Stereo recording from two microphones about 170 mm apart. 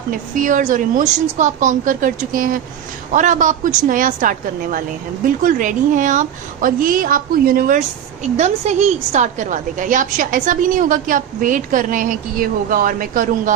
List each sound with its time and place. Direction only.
0.1 s a woman's voice: 50° right (ahead or behind)
8.2 s a woman's voice: 40° right (ahead or behind)